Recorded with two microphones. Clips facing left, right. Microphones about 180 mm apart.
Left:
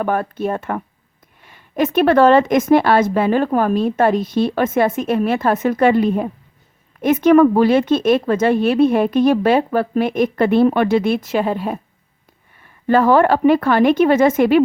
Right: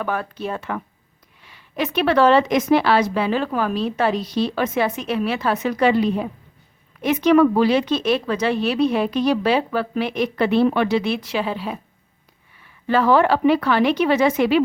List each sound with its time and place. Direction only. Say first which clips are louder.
0.0 s a woman's voice: left 6 dB; 50° left (ahead or behind)